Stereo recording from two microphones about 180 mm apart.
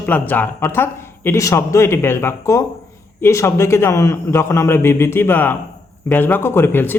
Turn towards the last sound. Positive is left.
turn(degrees=10)  # may be behind; listen again after turning